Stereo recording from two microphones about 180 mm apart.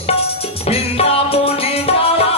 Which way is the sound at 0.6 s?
35° left (ahead or behind).